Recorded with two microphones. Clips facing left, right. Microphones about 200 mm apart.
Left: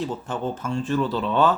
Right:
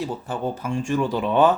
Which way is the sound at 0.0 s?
10° right (ahead or behind).